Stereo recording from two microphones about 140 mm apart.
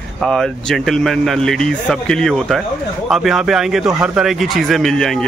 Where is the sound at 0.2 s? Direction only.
5° left (ahead or behind).